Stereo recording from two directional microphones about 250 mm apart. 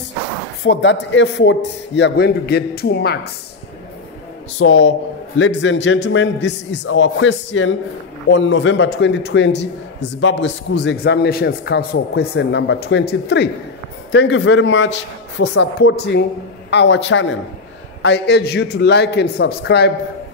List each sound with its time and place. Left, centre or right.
0.7 s a man's voice: left
4.6 s a man's voice: left